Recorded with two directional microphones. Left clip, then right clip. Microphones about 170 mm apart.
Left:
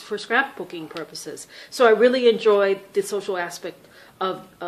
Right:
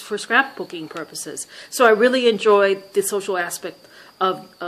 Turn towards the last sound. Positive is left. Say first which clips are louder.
# right 5 dB
turn(degrees=-35)  # may be behind; listen again after turning